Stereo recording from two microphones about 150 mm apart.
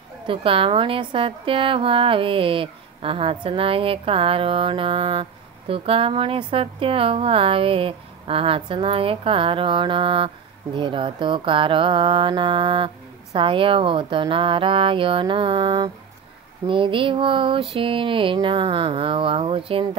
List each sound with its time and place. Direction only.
0.3 s a woman's voice: 35° right (ahead or behind)